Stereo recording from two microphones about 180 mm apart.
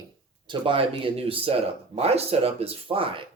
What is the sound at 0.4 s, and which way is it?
Speech, 30° right (ahead or behind).